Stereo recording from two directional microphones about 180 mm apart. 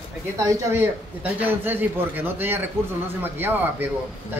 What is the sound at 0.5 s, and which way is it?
A man's voice, 10° right (ahead or behind).